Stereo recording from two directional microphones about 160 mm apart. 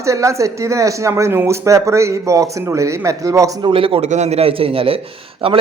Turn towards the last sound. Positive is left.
turn(degrees=-35)  # may be behind; listen again after turning